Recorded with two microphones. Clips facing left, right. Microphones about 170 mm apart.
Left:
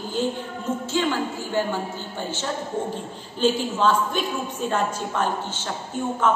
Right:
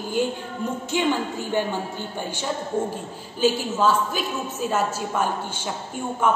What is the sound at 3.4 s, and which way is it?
Music, 10° right (ahead or behind).